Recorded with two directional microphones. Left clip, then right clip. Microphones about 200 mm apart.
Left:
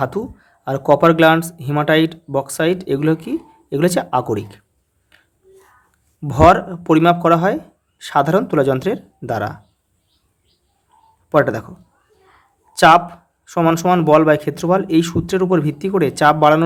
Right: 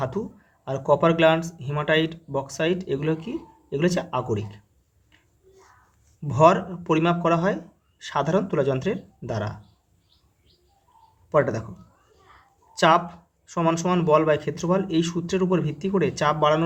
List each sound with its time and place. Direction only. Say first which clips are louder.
0.0 s speech: left 7 dB; 40° left (ahead or behind)
6.2 s speech: left 7 dB; 40° left (ahead or behind)
11.3 s speech: left 6 dB; 40° left (ahead or behind)
12.7 s speech: left 9 dB; 40° left (ahead or behind)